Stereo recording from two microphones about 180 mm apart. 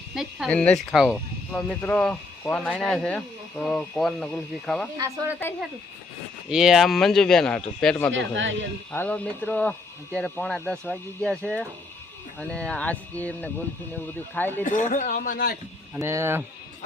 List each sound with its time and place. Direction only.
0.1 s speech: centre (ahead or behind)
4.9 s speech: 20° right (ahead or behind)
6.5 s speech: 5° right (ahead or behind)
8.1 s a man's voice: 90° right
8.9 s speech: 10° left (ahead or behind)
14.6 s a man's voice: 45° left (ahead or behind)
16.0 s speech: 15° right (ahead or behind)